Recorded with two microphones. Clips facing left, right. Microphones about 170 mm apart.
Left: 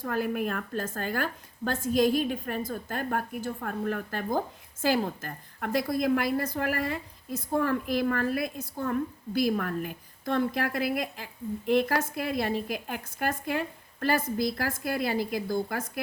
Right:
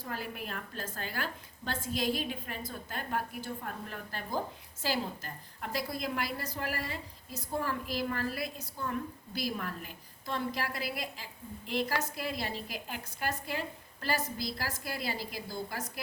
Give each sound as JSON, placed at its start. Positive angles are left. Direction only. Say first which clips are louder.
{"t": 0.0, "sound": "a woman's voice", "louder": "left 11 dB", "side_deg": 50}